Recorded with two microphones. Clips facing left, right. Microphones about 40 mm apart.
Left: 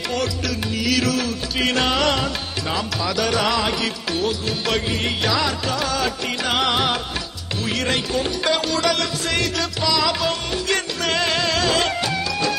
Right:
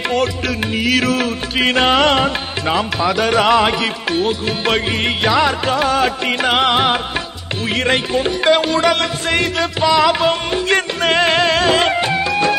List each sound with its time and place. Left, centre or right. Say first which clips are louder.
0.7 s music: right 5 dB; right